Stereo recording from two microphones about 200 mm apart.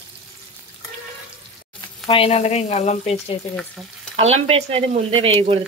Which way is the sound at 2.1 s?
30° left (ahead or behind).